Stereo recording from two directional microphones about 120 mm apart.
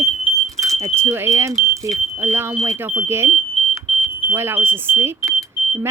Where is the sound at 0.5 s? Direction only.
25° right (ahead or behind).